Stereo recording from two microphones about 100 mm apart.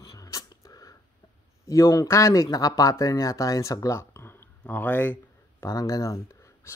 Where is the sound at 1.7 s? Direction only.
30° left (ahead or behind).